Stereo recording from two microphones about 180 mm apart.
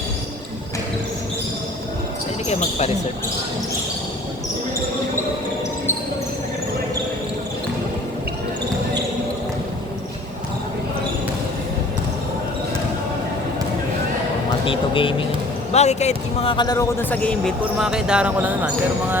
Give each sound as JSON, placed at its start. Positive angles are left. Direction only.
{"t": 2.5, "sound": "speech", "side_deg": 40}
{"t": 14.6, "sound": "a sound", "side_deg": 30}
{"t": 15.7, "sound": "a man's voice", "side_deg": 40}